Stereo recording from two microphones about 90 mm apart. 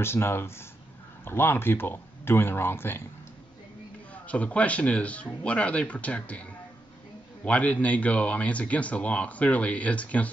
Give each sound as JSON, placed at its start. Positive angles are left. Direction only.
{"t": 0.0, "sound": "speech", "side_deg": 25}
{"t": 4.1, "sound": "speech", "side_deg": 15}
{"t": 7.4, "sound": "speech", "side_deg": 15}